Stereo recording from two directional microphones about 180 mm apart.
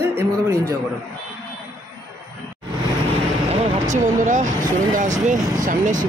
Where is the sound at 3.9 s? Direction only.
45° right (ahead or behind).